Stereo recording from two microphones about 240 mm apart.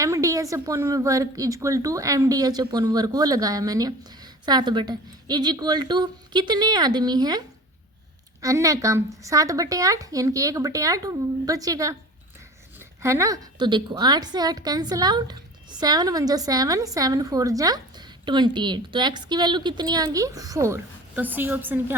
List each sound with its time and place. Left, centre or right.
0.0 s a woman's voice: centre
13.0 s a woman's voice: centre